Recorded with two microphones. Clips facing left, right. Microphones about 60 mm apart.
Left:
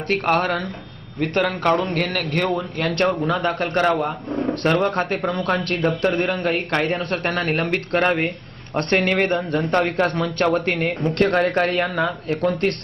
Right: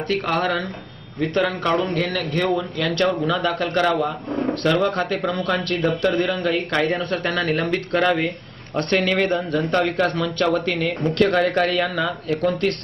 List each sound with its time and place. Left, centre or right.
0.1 s speech: left
4.3 s a sound: centre
4.6 s speech: left